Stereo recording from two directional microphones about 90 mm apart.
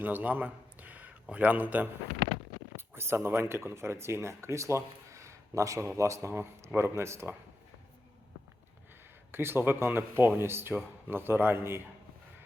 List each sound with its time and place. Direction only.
0.0 s a man's voice: 20° right (ahead or behind)
2.7 s a sound: 30° right (ahead or behind)
3.2 s a man's voice: 25° right (ahead or behind)
9.3 s speech: 25° right (ahead or behind)